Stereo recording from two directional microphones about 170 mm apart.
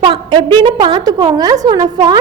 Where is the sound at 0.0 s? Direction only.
30° right (ahead or behind).